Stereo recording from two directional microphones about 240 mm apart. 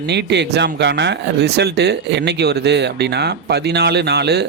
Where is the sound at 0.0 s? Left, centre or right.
Right.